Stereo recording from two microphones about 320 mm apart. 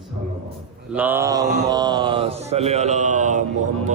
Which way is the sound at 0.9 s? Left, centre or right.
Centre.